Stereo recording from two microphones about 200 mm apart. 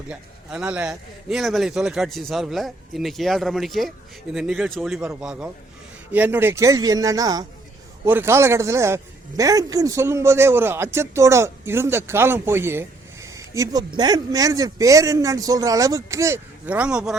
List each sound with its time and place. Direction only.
0.1 s a man's voice: 5° right (ahead or behind)